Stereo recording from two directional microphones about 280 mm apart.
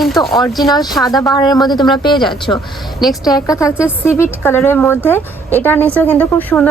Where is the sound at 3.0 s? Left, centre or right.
Centre.